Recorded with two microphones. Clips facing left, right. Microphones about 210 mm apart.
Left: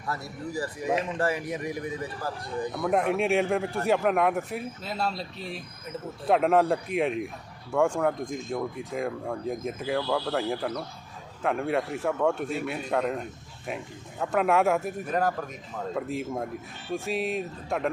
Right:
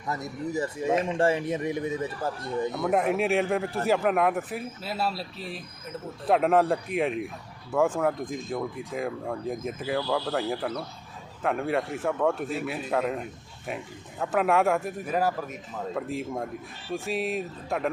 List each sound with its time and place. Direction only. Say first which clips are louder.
0.1 s speech: right 3 dB; 20° right (ahead or behind)
2.8 s a man's voice: left 1 dB; centre (ahead or behind)